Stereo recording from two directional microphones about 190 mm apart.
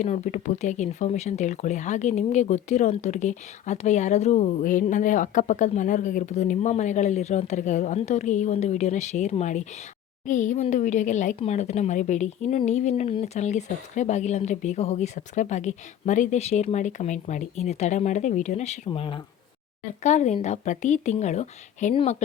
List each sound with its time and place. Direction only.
0.0 s speech: 40° left (ahead or behind)
18.9 s speech: 25° left (ahead or behind)
20.0 s speech: 40° left (ahead or behind)